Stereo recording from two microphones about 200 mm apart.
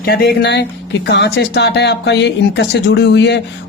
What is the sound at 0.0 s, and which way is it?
Speech, 55° left (ahead or behind).